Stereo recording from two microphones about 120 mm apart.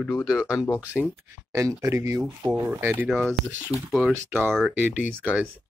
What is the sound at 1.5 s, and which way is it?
Speech, 25° right (ahead or behind).